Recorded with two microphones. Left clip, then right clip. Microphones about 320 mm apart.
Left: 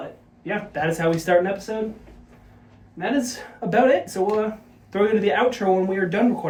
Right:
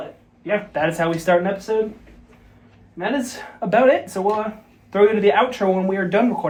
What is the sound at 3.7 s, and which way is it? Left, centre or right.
Speech, centre.